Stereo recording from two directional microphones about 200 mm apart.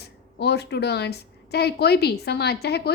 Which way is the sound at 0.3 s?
55° left (ahead or behind).